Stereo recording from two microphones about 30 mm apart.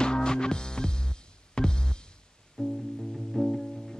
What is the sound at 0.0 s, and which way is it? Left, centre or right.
Music, left.